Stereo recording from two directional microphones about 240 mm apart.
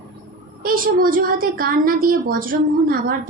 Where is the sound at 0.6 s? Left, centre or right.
Right.